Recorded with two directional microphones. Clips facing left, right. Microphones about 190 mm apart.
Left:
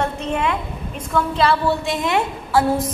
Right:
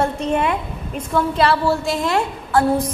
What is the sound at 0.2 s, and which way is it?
Speech, 40° right (ahead or behind).